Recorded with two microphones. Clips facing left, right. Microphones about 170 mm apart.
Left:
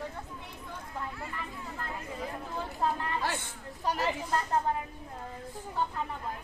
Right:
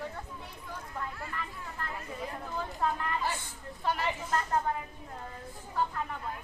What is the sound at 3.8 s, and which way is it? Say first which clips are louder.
Speech: left 1 dB; 40° left (ahead or behind).